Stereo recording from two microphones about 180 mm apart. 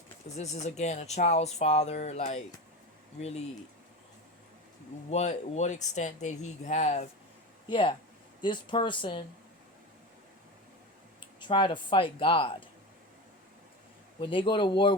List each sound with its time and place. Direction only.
0.3 s speech: 40° left (ahead or behind)
5.1 s speech: 40° left (ahead or behind)
7.7 s speech: 25° left (ahead or behind)
11.3 s speech: 25° left (ahead or behind)
14.2 s speech: 30° left (ahead or behind)